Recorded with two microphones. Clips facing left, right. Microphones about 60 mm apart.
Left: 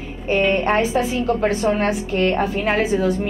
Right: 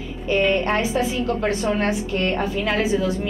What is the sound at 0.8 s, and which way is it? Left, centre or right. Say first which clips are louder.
Speech: left 2 dB; left.